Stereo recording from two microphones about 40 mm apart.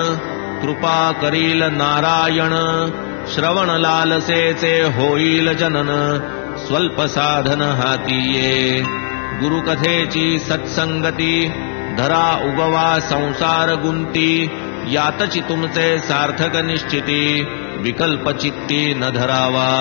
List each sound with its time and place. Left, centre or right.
0.7 s mantra: centre